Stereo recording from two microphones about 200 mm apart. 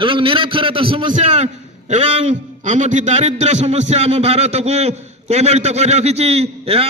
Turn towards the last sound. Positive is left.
turn(degrees=-30)  # may be behind; listen again after turning